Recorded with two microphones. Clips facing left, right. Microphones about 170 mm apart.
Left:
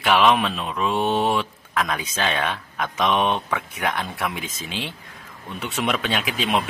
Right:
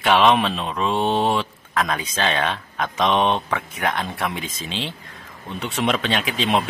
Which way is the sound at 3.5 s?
10° left (ahead or behind).